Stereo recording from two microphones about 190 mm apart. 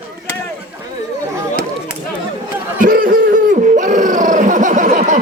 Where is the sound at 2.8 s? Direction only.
45° right (ahead or behind).